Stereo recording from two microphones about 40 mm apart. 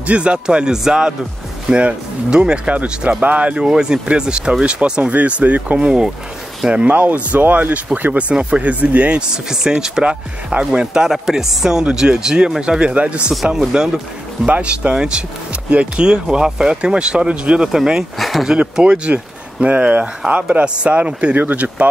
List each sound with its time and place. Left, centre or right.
0.0 s speech: right
1.7 s a man's voice: right
2.7 s a man's voice: right
3.5 s speech: centre
5.1 s a man's voice: right
5.8 s a man's voice: right
7.2 s speech: right
8.1 s a man's voice: right
9.8 s a man's voice: centre
13.6 s speech: centre
14.4 s speech: right
18.2 s speech: centre
18.8 s a man's voice: right